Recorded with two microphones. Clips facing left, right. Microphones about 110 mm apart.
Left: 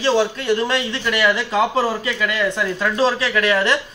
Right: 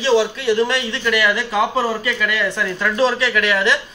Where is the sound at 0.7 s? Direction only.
30° left (ahead or behind).